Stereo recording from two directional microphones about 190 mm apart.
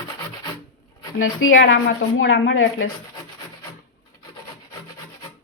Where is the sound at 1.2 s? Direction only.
90° left.